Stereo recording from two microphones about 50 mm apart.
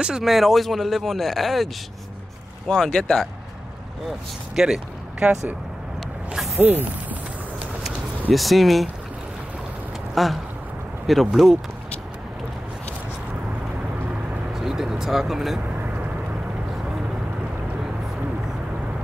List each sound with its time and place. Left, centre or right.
0.0 s speech: centre
2.7 s speech: centre
4.6 s speech: centre
6.6 s speech: right
8.3 s speech: centre
10.1 s speech: centre
14.5 s speech: centre